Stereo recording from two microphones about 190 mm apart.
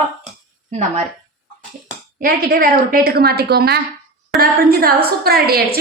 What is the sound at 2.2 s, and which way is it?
A woman's voice, 50° right (ahead or behind).